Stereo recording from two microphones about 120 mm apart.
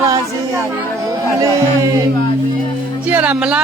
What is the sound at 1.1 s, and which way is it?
Speech, 25° right (ahead or behind).